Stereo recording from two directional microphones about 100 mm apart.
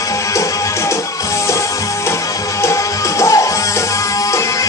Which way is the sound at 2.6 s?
30° left (ahead or behind).